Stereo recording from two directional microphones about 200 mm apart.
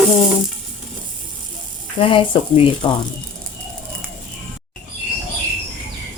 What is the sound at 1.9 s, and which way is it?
Speech, 25° left (ahead or behind).